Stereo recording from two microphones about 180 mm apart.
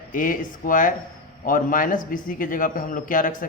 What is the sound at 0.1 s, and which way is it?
A man's voice, 50° left (ahead or behind).